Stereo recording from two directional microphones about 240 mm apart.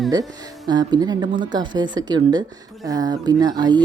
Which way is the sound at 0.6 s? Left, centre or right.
Centre.